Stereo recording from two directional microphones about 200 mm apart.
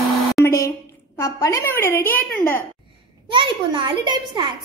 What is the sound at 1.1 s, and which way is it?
A woman's voice, 15° left (ahead or behind).